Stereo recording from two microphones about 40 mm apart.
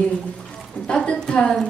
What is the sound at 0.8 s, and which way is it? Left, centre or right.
Speech, left.